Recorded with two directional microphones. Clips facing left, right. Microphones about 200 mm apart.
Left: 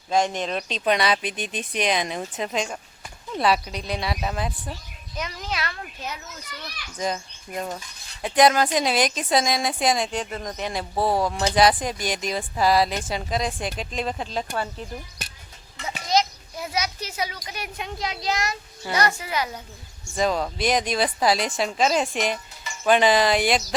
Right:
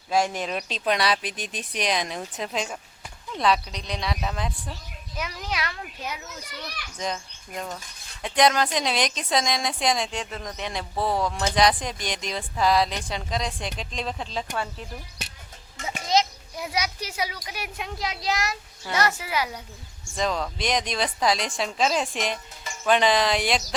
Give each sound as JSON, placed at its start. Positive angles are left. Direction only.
{"t": 0.1, "sound": "speech", "side_deg": -5}
{"t": 5.1, "sound": "speech", "side_deg": -10}
{"t": 7.0, "sound": "speech", "side_deg": 5}
{"t": 10.9, "sound": "speech", "side_deg": 30}
{"t": 11.3, "sound": "speech", "side_deg": 5}
{"t": 15.8, "sound": "a child's voice", "side_deg": -45}
{"t": 16.1, "sound": "children playing", "side_deg": -25}
{"t": 16.6, "sound": "speech", "side_deg": -15}
{"t": 20.1, "sound": "speech", "side_deg": 5}